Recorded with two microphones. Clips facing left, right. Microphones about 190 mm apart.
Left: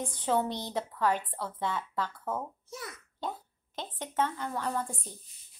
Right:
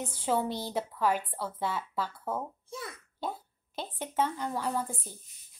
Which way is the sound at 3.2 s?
10° right (ahead or behind).